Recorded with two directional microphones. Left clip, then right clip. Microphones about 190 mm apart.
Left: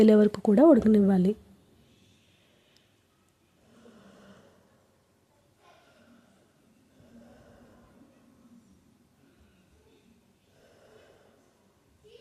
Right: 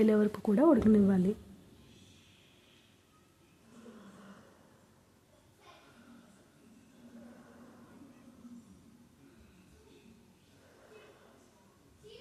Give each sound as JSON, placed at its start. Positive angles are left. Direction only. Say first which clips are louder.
{"t": 0.0, "sound": "speech", "louder": "left 8 dB", "side_deg": 25}